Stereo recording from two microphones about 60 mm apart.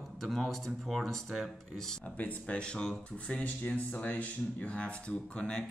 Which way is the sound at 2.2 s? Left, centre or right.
Left.